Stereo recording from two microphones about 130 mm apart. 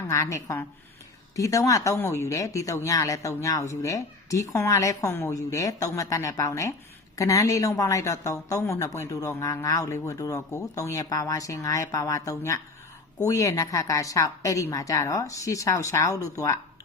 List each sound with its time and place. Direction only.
0.1 s speech: 25° left (ahead or behind)